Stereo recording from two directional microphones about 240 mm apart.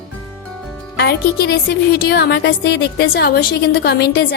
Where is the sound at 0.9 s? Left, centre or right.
Left.